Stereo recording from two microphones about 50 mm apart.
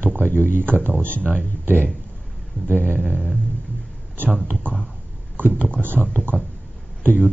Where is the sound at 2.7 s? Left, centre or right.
Right.